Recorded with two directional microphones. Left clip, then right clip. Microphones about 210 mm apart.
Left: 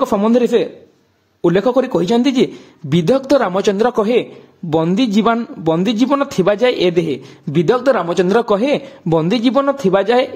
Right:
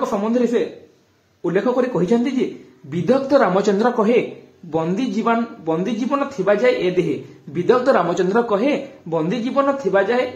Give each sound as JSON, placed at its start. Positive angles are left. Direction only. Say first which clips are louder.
{"t": 0.0, "sound": "a man's voice", "louder": "left 5 dB", "side_deg": 50}
{"t": 8.0, "sound": "a man's voice", "louder": "left 3 dB", "side_deg": 40}